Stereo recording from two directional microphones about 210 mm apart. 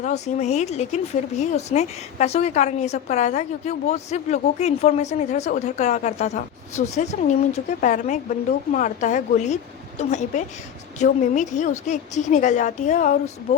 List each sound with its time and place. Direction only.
0.0 s speech: 30° left (ahead or behind)